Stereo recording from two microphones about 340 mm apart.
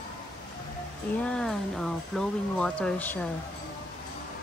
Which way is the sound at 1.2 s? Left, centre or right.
Centre.